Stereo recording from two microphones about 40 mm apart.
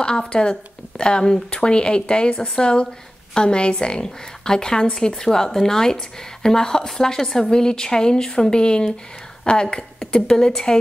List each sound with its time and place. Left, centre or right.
0.0 s a woman's voice: left